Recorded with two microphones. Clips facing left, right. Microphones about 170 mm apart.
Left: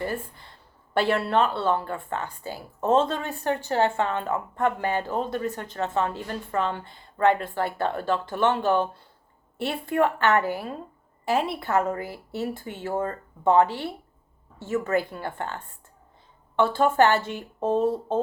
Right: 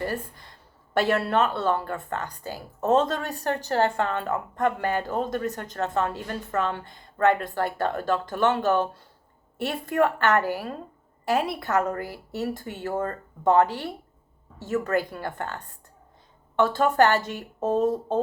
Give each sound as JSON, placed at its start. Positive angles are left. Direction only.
{"t": 0.0, "sound": "speech", "side_deg": -40}
{"t": 14.9, "sound": "speech", "side_deg": -40}